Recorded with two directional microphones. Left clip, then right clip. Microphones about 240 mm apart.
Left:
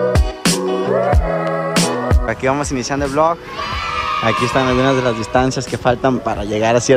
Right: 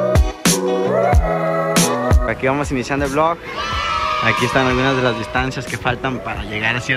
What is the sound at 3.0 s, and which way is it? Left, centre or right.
A man's voice, centre.